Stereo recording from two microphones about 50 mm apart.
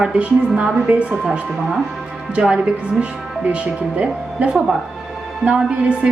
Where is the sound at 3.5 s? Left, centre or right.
Right.